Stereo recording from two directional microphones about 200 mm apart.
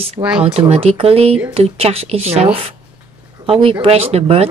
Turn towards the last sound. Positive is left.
turn(degrees=-30)  # may be behind; listen again after turning